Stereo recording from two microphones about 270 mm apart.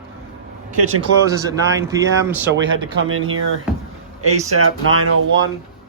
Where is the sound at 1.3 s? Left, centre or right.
Centre.